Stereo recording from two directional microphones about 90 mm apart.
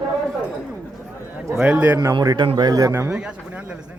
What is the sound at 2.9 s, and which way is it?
Speech, 30° right (ahead or behind).